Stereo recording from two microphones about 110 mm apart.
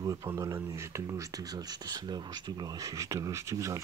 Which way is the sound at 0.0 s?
30° right (ahead or behind).